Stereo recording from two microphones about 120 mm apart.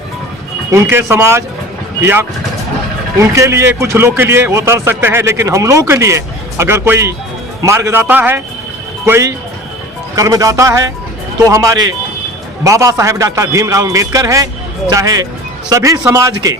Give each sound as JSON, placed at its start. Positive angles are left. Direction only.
{"t": 0.7, "sound": "a man's voice", "side_deg": -20}